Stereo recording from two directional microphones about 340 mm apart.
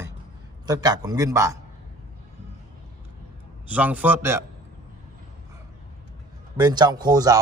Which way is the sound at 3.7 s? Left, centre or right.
Centre.